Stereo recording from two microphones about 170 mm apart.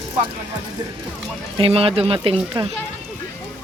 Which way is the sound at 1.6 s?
35° right (ahead or behind).